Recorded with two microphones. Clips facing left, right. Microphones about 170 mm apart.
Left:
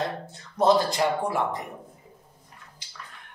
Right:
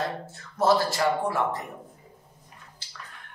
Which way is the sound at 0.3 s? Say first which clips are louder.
Left 2 dB; 20° left (ahead or behind).